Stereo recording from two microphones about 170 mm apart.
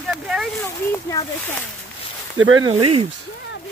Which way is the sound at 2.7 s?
35° right (ahead or behind).